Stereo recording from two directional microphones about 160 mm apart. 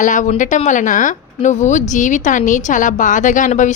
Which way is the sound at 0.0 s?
50° left (ahead or behind).